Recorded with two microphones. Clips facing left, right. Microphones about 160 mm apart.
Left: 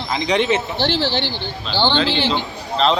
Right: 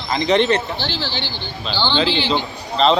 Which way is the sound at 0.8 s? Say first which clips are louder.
Left 6 dB; 65° left (ahead or behind).